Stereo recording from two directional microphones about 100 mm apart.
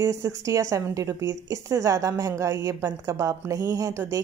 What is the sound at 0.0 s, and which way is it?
Speech, 35° right (ahead or behind).